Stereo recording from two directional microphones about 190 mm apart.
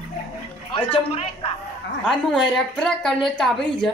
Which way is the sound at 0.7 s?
30° left (ahead or behind).